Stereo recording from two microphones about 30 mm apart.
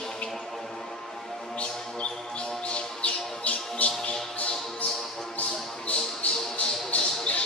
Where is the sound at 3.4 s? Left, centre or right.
Left.